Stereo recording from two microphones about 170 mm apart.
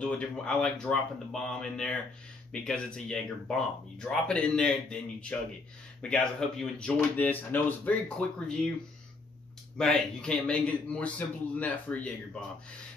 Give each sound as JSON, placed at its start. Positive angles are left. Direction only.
{"t": 0.0, "sound": "speech", "side_deg": 5}
{"t": 9.8, "sound": "a man's voice", "side_deg": 5}